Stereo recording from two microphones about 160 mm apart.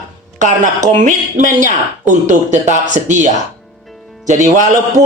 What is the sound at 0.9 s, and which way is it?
A man's voice, 50° right (ahead or behind).